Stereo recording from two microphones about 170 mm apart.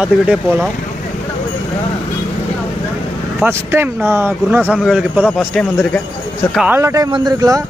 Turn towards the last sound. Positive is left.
turn(degrees=-20)  # may be behind; listen again after turning